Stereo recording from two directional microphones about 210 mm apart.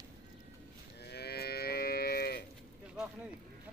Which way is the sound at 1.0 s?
50° left (ahead or behind).